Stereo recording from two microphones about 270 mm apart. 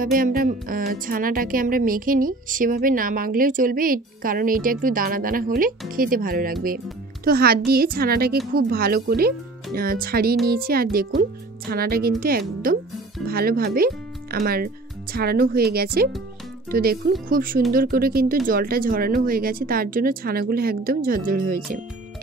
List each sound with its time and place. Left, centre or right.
0.0 s speech: right